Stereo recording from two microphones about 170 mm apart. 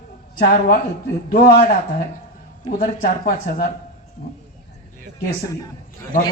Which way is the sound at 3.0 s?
55° left (ahead or behind).